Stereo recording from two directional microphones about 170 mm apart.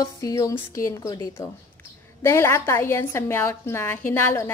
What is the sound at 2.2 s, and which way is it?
A woman's voice, 15° left (ahead or behind).